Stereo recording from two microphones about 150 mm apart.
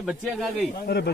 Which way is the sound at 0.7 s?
90° left.